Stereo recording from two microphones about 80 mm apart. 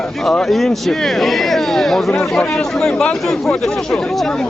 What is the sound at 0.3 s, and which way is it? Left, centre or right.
Speech, centre.